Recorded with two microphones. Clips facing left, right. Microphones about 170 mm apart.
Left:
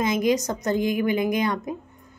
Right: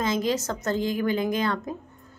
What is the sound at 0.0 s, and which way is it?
A woman's voice, 15° left (ahead or behind).